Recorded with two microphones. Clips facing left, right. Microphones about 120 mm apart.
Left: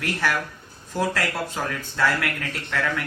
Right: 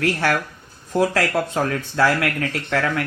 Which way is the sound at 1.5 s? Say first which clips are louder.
Right 7 dB; 65° right (ahead or behind).